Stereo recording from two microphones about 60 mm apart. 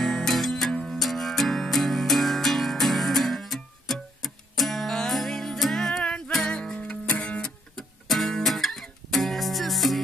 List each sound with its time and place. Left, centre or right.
0.0 s music: centre
8.1 s music: centre